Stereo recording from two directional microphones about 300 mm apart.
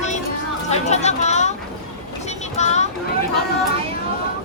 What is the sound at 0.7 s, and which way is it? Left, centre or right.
Chatter, left.